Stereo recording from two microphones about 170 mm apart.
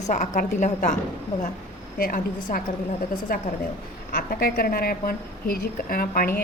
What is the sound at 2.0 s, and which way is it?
A woman's voice, 60° left (ahead or behind).